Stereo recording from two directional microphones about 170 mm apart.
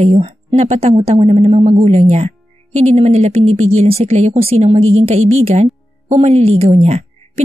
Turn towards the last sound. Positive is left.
turn(degrees=-40)  # may be behind; listen again after turning